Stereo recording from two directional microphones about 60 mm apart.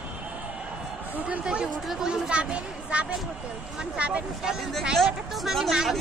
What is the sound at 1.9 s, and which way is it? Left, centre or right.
Speech, centre.